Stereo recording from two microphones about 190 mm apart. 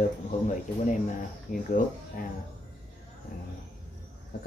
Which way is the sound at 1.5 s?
45° left (ahead or behind).